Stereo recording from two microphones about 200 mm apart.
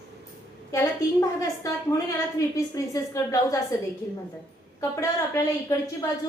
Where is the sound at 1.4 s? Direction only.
15° left (ahead or behind).